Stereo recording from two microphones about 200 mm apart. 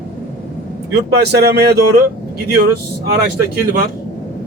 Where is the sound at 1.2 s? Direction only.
55° right (ahead or behind).